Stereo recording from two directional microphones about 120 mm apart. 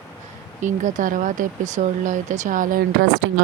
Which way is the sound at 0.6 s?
90° right.